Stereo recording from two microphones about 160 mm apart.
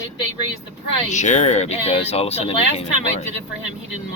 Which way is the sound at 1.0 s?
50° left (ahead or behind).